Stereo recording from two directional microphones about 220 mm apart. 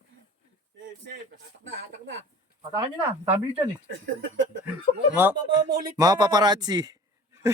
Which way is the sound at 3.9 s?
60° right (ahead or behind).